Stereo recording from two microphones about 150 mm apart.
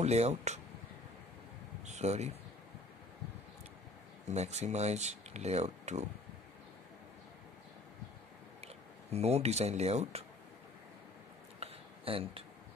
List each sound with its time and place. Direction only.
0.0 s speech: 45° right (ahead or behind)
1.9 s speech: 50° right (ahead or behind)
4.3 s speech: 50° right (ahead or behind)
9.1 s speech: 45° right (ahead or behind)
11.6 s a sound: 40° right (ahead or behind)